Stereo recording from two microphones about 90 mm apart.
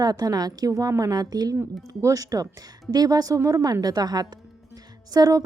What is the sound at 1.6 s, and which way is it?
A woman's voice, 35° right (ahead or behind).